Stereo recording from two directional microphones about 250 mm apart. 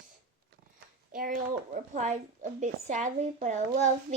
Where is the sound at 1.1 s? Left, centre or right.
Right.